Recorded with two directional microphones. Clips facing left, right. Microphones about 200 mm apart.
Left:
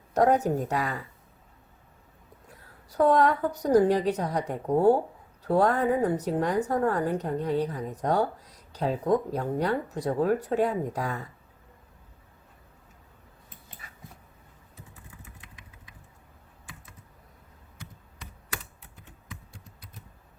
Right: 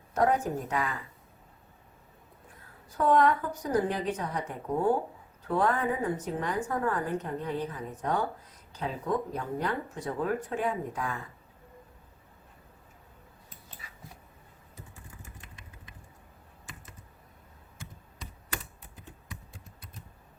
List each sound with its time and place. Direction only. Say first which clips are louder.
0.1 s a woman's voice: left 4 dB; 35° left (ahead or behind)
2.9 s speech: left 2 dB; 40° left (ahead or behind)
13.8 s dog: left 1 dB; 55° left (ahead or behind)